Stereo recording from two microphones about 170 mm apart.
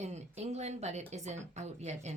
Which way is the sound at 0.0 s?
40° right (ahead or behind).